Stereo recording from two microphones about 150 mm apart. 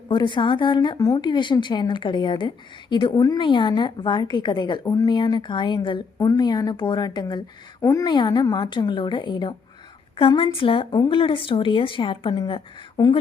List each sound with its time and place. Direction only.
0.1 s a woman's voice: 30° left (ahead or behind)